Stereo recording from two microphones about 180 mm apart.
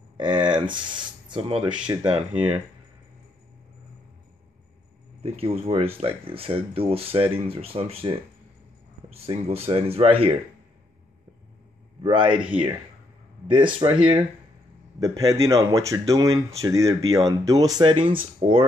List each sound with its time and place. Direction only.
0.2 s speech: 25° right (ahead or behind)
5.2 s speech: 35° right (ahead or behind)
12.0 s speech: 30° right (ahead or behind)
13.7 s speech: 30° right (ahead or behind)
15.0 s speech: 20° right (ahead or behind)